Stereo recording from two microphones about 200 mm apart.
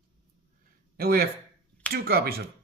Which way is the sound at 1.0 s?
50° right (ahead or behind).